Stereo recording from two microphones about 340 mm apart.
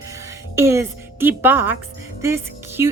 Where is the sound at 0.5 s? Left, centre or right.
Centre.